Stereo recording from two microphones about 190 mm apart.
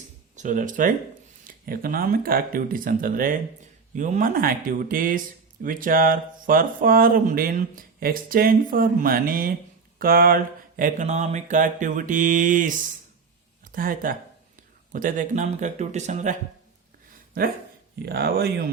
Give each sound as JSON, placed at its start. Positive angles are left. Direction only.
{"t": 0.3, "sound": "speech", "side_deg": -40}
{"t": 13.7, "sound": "speech", "side_deg": -45}
{"t": 18.0, "sound": "speech", "side_deg": -55}